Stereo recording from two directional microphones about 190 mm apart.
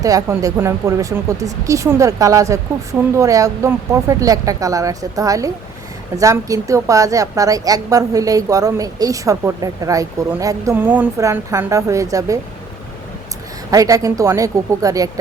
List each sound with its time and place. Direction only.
0.0 s a woman's voice: 20° right (ahead or behind)
13.7 s a woman's voice: 20° right (ahead or behind)